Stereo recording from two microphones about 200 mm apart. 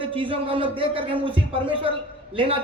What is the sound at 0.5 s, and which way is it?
Speech, 25° right (ahead or behind).